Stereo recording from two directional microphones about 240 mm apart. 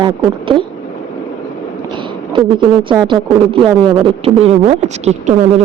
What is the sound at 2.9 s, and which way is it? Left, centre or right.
Speech, centre.